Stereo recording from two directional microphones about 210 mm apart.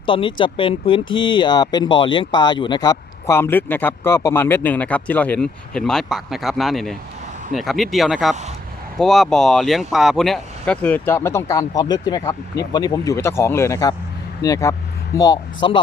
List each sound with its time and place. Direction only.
0.0 s speech: 25° left (ahead or behind)